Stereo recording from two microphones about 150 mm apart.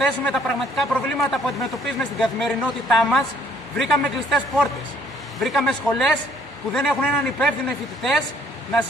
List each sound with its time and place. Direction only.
0.0 s speech: centre (ahead or behind)